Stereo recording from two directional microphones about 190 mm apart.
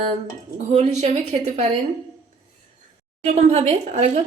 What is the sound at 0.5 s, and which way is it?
A woman's voice, 35° right (ahead or behind).